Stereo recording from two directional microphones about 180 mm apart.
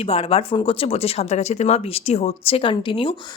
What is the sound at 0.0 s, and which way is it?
A woman's voice, 30° left (ahead or behind).